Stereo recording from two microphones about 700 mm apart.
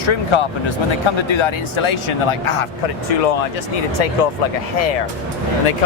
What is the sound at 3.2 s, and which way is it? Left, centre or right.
Speech, left.